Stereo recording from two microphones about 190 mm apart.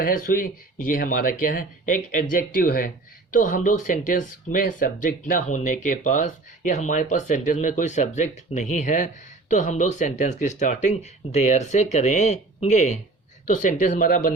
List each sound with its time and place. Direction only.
0.0 s speech: 50° left (ahead or behind)